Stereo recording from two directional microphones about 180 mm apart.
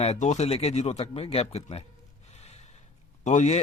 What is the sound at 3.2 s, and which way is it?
Speech, 40° left (ahead or behind).